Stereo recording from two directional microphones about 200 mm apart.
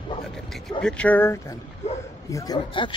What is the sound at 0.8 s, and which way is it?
Speech, 5° left (ahead or behind).